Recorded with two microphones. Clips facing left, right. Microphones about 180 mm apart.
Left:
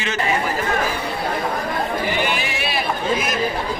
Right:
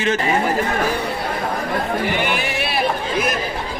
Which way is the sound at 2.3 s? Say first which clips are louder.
Right 2 dB; 55° right (ahead or behind).